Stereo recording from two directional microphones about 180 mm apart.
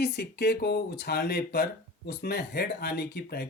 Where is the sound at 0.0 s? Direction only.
65° left (ahead or behind).